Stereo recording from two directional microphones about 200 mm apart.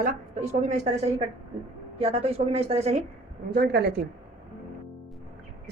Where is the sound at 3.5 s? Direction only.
55° right (ahead or behind).